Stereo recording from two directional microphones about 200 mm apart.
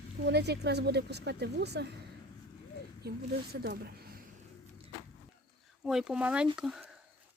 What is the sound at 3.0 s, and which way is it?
Speech, 55° right (ahead or behind).